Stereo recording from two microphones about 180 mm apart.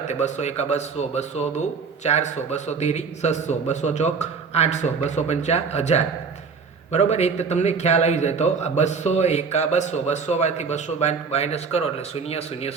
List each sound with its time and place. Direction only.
0.1 s a man's voice: 40° left (ahead or behind)